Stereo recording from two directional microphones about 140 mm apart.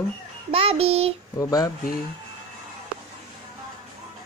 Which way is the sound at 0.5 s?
40° right (ahead or behind).